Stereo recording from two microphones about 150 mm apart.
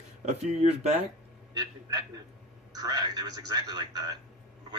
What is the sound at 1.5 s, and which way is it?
A man's voice, 25° right (ahead or behind).